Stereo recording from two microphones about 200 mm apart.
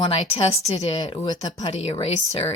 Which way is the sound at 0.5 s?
30° left (ahead or behind).